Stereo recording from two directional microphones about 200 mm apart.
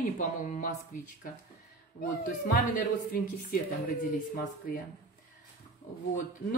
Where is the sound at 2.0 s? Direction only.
45° left (ahead or behind).